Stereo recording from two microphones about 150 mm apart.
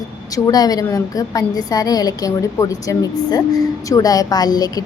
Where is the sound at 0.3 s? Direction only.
25° left (ahead or behind).